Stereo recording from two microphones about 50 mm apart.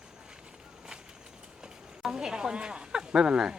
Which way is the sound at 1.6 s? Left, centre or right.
Centre.